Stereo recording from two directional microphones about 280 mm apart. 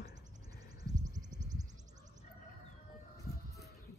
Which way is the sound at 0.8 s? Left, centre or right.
Centre.